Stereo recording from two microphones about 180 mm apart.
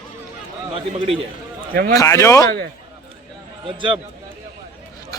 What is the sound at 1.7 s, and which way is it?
Speech, 50° right (ahead or behind).